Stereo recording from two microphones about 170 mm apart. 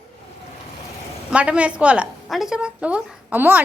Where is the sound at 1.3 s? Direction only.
5° right (ahead or behind).